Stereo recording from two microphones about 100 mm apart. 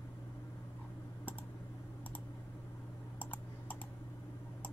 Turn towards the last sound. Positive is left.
turn(degrees=15)  # may be behind; listen again after turning